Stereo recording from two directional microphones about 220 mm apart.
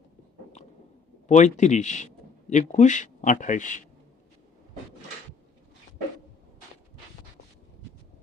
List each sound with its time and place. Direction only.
1.3 s a man's voice: 30° left (ahead or behind)